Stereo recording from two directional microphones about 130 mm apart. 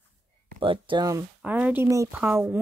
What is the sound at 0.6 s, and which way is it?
Speech, 40° right (ahead or behind).